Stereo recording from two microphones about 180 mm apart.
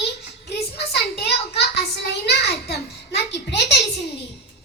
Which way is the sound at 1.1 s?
65° left (ahead or behind).